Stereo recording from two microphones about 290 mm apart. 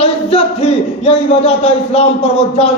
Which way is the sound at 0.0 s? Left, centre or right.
Left.